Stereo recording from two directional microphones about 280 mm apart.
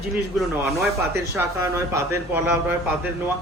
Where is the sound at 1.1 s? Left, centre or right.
Centre.